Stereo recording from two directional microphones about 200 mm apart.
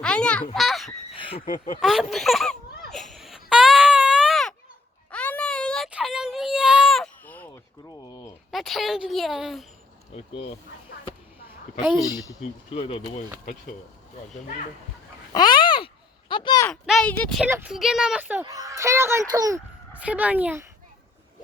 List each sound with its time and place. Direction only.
0.0 s speech: 5° left (ahead or behind)
0.5 s honk: centre (ahead or behind)
1.8 s a woman's voice: centre (ahead or behind)
2.9 s baby cry: centre (ahead or behind)
7.9 s a sound: 20° left (ahead or behind)
8.4 s a woman's voice: centre (ahead or behind)
10.2 s speech: 30° left (ahead or behind)
12.0 s speech: 15° left (ahead or behind)
12.7 s speech: 30° left (ahead or behind)
13.4 s speech: 40° left (ahead or behind)
15.3 s a sound: 20° left (ahead or behind)
16.8 s a woman's voice: centre (ahead or behind); by 19.6 s 15° right (ahead or behind)
20.0 s speech: 5° right (ahead or behind)